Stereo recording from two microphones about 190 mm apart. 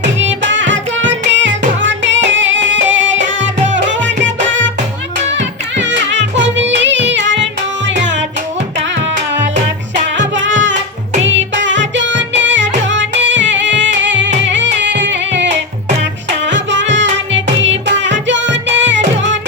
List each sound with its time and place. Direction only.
0.2 s music: 75° right (ahead or behind)
7.9 s tabla: 70° right (ahead or behind)
10.2 s music: 75° right (ahead or behind)